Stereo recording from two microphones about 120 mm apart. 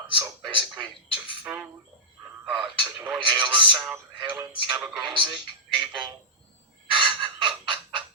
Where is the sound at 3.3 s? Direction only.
40° right (ahead or behind).